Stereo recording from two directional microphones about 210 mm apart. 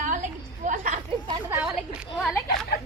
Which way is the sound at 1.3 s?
15° right (ahead or behind).